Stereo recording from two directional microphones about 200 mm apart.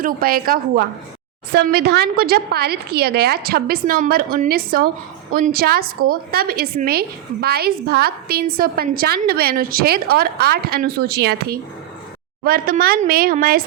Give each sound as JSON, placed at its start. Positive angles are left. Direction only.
{"t": 0.0, "sound": "a woman's voice", "side_deg": -45}